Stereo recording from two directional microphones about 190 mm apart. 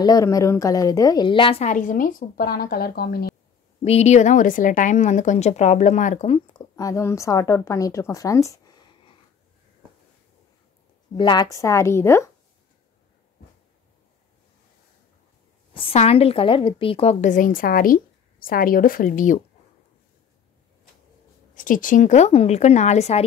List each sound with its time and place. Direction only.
0.0 s a woman's voice: 20° left (ahead or behind); by 3.3 s 55° left (ahead or behind)
3.8 s a woman's voice: 35° left (ahead or behind)
6.7 s a woman's voice: 15° left (ahead or behind)
11.1 s a woman's voice: 25° left (ahead or behind)
15.7 s a woman's voice: 30° left (ahead or behind)
21.5 s a woman's voice: 45° left (ahead or behind)